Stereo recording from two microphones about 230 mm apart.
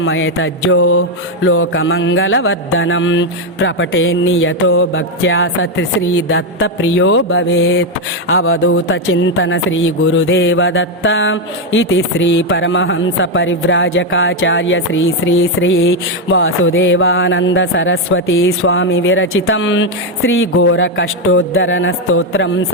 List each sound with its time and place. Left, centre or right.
0.0 s speech: left